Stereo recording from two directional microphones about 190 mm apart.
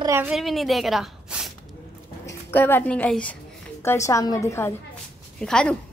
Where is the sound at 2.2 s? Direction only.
10° left (ahead or behind).